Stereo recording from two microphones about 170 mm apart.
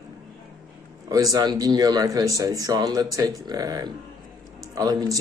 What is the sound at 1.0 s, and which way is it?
Speech, 20° right (ahead or behind).